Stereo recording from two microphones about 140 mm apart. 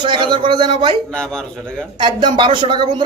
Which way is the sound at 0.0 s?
35° right (ahead or behind).